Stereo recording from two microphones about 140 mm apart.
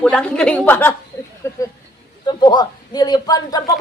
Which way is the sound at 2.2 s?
30° left (ahead or behind).